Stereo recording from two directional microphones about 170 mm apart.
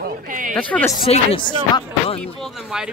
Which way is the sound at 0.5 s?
10° left (ahead or behind).